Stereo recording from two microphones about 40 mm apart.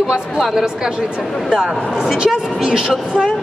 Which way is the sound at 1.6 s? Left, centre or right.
Centre.